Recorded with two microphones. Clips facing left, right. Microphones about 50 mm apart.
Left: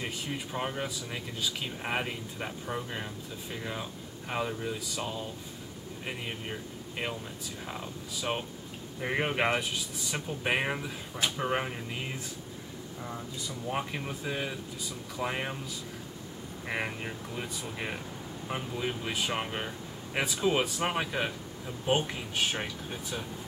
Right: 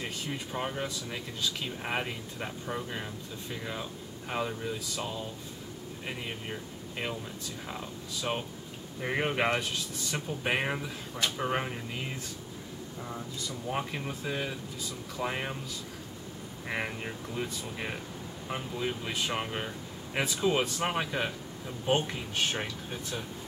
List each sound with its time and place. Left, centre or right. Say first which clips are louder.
0.0 s speech: left 1 dB; centre
16.6 s speech: even; centre